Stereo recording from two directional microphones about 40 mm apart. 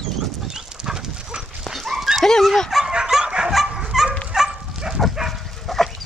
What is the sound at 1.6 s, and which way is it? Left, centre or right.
Dog, centre.